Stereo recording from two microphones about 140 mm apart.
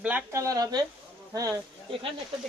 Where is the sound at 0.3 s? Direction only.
20° right (ahead or behind).